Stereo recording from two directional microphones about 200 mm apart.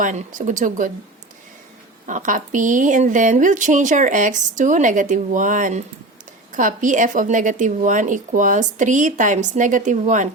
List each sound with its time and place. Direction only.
0.0 s a woman's voice: 40° right (ahead or behind)
2.0 s a woman's voice: 40° right (ahead or behind)